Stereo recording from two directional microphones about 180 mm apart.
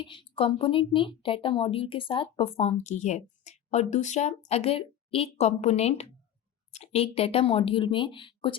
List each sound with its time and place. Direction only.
0.0 s speech: 30° left (ahead or behind)